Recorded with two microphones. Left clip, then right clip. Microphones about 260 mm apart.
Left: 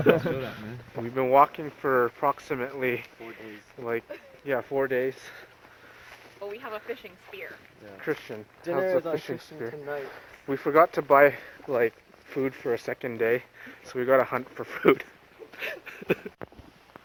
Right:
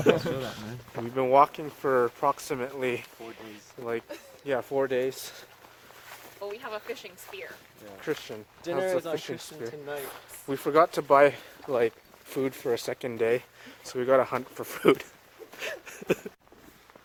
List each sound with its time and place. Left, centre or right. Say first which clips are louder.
0.3 s speech: even; right
3.5 s a sound: left 2 dB; centre
4.4 s speech: left 1 dB; right
6.4 s speech: even; right
8.0 s speech: left 1 dB; centre
15.5 s a sound: left 1 dB; right